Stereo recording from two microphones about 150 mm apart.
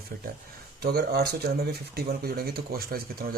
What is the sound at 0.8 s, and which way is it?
Speech, 90° right.